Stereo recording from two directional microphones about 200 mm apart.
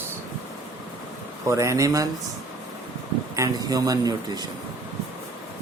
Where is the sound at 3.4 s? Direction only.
20° right (ahead or behind).